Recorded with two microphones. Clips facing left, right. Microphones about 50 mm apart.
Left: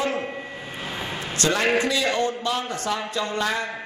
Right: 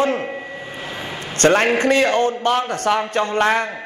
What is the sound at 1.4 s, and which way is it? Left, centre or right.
A man's voice, right.